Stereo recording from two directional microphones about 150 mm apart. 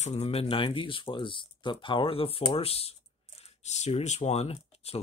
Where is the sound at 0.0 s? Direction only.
45° left (ahead or behind).